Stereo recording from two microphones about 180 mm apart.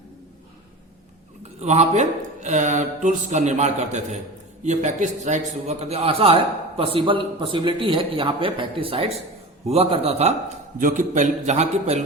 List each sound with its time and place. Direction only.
1.6 s a man's voice: 40° right (ahead or behind)
10.8 s speech: 45° right (ahead or behind)